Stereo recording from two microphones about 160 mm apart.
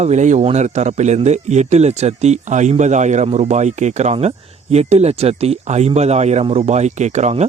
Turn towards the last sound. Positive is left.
turn(degrees=-45)  # may be behind; listen again after turning